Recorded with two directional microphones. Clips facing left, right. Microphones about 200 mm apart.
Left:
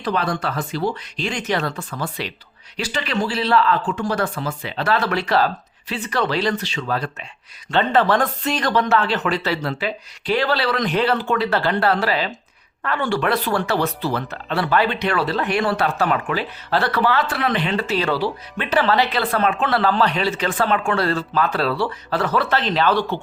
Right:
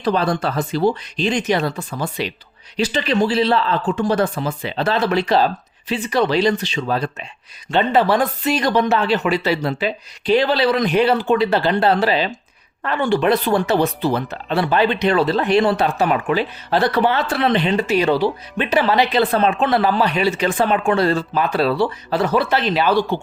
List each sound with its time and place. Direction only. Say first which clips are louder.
0.0 s speech: right 4 dB; 30° right (ahead or behind)
17.7 s speech: right 4 dB; 15° right (ahead or behind)